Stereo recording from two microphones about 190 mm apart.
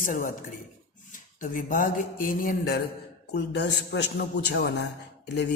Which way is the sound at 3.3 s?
65° left (ahead or behind).